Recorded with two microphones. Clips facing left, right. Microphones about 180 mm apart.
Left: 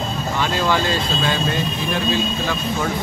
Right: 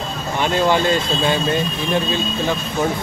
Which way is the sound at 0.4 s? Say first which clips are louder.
Right 4 dB; 20° right (ahead or behind).